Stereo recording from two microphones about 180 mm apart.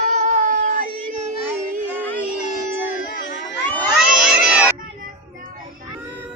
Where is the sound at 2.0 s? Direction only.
10° left (ahead or behind).